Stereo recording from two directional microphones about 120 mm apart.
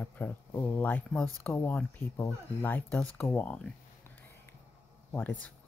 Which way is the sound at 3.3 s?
15° left (ahead or behind).